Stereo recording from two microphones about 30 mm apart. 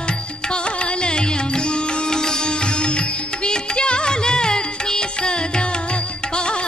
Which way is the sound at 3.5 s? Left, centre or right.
Left.